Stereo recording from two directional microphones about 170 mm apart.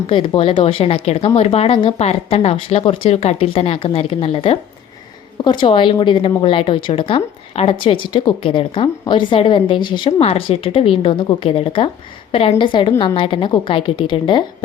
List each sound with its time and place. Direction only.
0.1 s a woman's voice: 30° left (ahead or behind)